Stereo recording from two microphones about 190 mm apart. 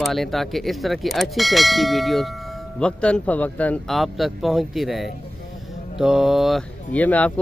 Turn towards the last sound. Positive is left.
turn(degrees=10)  # may be behind; listen again after turning